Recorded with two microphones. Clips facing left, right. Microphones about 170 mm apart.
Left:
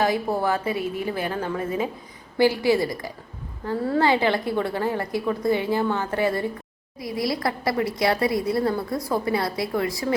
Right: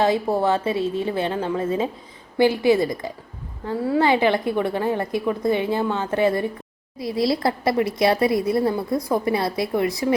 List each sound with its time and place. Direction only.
0.4 s a woman's voice: 25° right (ahead or behind)